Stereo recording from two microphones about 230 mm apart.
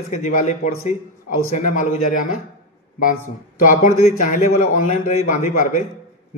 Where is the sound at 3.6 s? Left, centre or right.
Left.